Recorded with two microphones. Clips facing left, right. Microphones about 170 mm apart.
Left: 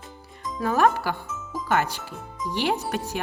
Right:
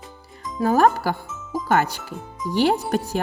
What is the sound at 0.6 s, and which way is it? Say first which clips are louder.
Speech: right 4 dB; 35° right (ahead or behind).